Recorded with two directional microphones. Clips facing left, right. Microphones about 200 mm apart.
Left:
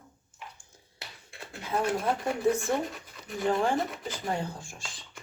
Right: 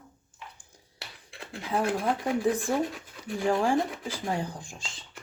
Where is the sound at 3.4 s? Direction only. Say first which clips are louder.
Right 2 dB; 10° right (ahead or behind).